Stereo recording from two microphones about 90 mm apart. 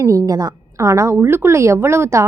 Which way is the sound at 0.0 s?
40° right (ahead or behind).